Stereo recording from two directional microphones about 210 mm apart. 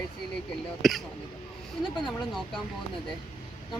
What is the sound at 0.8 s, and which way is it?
Speech, centre (ahead or behind).